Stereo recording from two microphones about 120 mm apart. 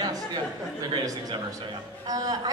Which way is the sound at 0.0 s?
35° right (ahead or behind).